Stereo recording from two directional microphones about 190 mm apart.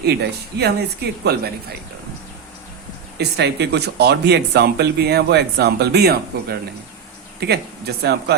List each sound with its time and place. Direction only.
0.0 s speech: 60° right (ahead or behind)
3.2 s speech: 60° right (ahead or behind)